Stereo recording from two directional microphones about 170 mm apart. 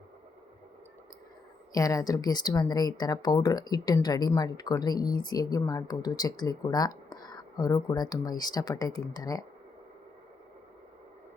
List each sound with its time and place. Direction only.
1.7 s speech: 20° left (ahead or behind)